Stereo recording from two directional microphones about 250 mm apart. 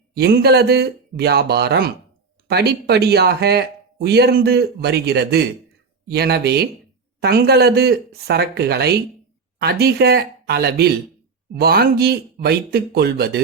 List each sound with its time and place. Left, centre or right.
0.1 s speech: right